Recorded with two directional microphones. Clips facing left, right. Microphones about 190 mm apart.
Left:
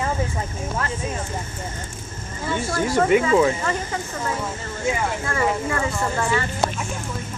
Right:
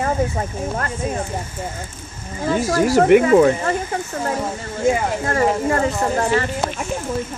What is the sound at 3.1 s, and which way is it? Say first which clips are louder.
Speech: right 5 dB; 55° right (ahead or behind).